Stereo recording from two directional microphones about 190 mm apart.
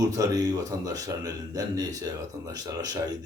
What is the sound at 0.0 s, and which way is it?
A man's voice, 20° right (ahead or behind).